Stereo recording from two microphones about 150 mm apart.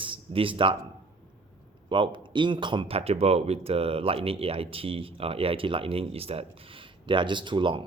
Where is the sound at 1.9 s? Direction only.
35° right (ahead or behind).